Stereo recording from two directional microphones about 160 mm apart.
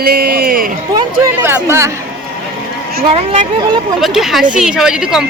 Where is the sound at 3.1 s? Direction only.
45° right (ahead or behind).